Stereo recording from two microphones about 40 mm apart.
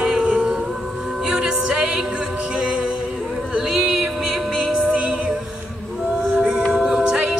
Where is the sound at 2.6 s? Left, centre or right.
Right.